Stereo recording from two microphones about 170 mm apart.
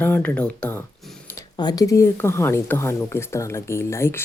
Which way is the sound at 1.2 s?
20° left (ahead or behind).